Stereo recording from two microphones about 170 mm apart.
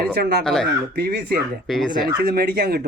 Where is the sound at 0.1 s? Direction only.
70° right (ahead or behind).